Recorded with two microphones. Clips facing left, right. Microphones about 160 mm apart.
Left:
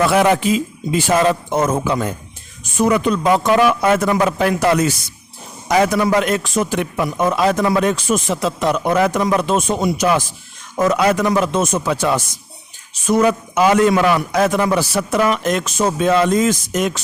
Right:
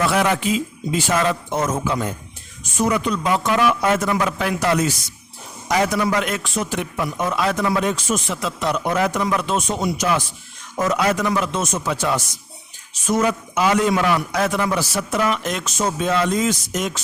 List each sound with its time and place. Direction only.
0.1 s a man's voice: 50° left (ahead or behind)
3.8 s speech: 60° left (ahead or behind)
4.1 s a man's voice: 45° left (ahead or behind); by 4.9 s 60° left (ahead or behind)
5.6 s a man's voice: 50° left (ahead or behind)
7.2 s a man's voice: 40° left (ahead or behind)
7.9 s speech: 60° left (ahead or behind)
8.3 s speech: 40° left (ahead or behind)
8.7 s speech: 60° left (ahead or behind)
9.2 s a man's voice: 40° left (ahead or behind); by 11.3 s 60° left (ahead or behind)
11.3 s speech: 40° left (ahead or behind)
11.6 s speech: 60° left (ahead or behind); by 14.2 s 80° left
14.3 s speech: 45° left (ahead or behind); by 17.0 s 60° left (ahead or behind)